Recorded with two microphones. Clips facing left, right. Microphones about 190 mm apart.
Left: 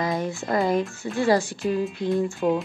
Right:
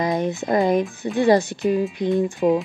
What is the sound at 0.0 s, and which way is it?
Speech, 20° right (ahead or behind).